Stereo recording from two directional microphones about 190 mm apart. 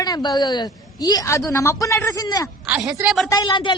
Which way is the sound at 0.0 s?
20° left (ahead or behind).